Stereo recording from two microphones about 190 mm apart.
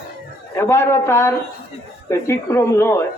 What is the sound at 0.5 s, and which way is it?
Speech, 10° left (ahead or behind).